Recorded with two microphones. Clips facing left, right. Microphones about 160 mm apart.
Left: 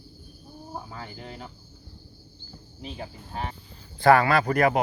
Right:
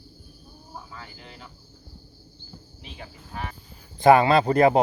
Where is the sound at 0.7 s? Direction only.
40° left (ahead or behind).